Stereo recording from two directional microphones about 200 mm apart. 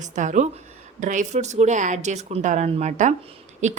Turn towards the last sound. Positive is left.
turn(degrees=-35)  # may be behind; listen again after turning